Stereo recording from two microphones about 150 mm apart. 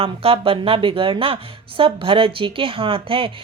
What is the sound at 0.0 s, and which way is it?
A woman's voice, 40° right (ahead or behind).